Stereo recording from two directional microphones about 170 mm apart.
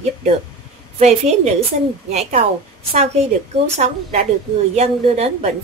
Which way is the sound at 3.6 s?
40° right (ahead or behind).